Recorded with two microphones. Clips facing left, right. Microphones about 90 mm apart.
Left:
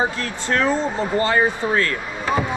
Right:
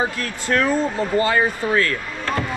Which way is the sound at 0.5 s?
20° left (ahead or behind).